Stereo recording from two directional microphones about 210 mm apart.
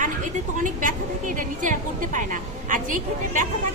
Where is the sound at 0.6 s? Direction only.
40° right (ahead or behind).